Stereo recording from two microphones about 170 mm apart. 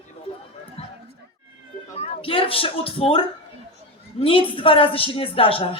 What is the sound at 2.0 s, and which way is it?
A woman's voice, 35° left (ahead or behind).